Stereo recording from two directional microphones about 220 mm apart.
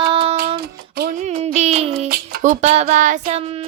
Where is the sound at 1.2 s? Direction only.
30° right (ahead or behind).